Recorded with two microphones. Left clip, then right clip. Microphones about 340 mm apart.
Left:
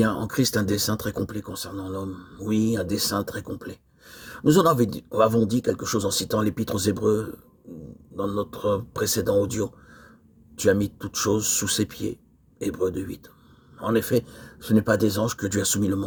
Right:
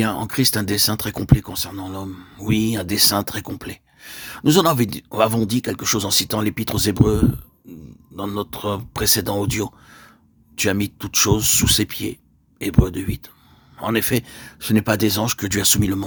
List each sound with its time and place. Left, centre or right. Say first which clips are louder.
0.0 s speech: right 3 dB; right